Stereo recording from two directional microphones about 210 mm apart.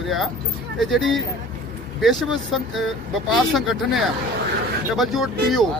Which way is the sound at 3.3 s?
Centre (ahead or behind).